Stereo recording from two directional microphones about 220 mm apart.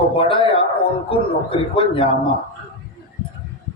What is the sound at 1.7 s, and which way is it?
Speech, 25° left (ahead or behind).